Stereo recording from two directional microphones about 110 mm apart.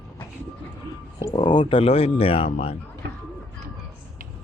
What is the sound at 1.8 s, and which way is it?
Speech, 65° left (ahead or behind).